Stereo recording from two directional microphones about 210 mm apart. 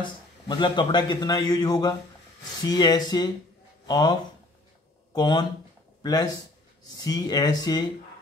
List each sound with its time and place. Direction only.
0.0 s a man's voice: 20° left (ahead or behind)
7.0 s a man's voice: 20° left (ahead or behind)